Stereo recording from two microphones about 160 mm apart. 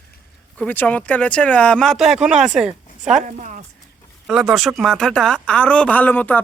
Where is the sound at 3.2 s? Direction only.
50° right (ahead or behind).